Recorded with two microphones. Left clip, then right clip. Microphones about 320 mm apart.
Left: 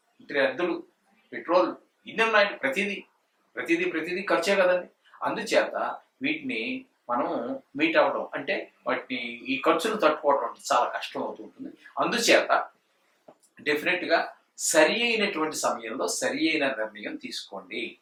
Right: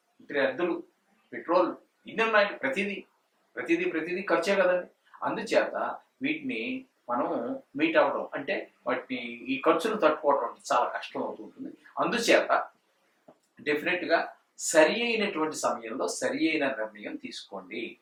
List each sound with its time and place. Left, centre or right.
0.3 s speech: centre
7.3 s speech: centre
7.8 s speech: centre
13.6 s speech: centre